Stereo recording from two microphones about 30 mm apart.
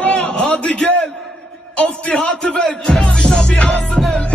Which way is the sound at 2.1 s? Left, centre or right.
Centre.